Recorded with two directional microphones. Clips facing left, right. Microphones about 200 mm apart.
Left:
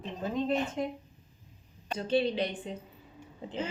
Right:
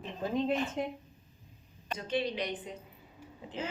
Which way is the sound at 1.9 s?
30° left (ahead or behind).